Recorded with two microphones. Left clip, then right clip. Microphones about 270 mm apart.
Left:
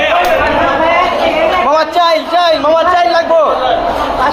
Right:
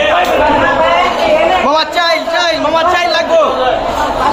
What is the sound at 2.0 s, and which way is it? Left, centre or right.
A man's voice, centre.